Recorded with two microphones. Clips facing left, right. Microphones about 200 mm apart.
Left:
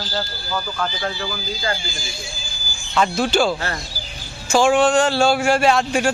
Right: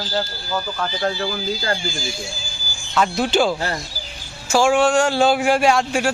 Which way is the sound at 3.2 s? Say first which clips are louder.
Right 1 dB; 20° right (ahead or behind).